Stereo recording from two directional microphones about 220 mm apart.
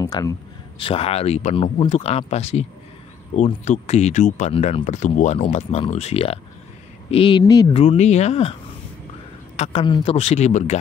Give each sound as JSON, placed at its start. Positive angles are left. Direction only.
{"t": 0.0, "sound": "a sound", "side_deg": 15}
{"t": 0.7, "sound": "speech", "side_deg": 25}
{"t": 9.6, "sound": "speech", "side_deg": 25}